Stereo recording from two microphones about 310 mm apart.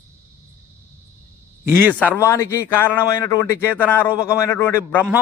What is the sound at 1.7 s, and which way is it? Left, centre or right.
Speech, centre.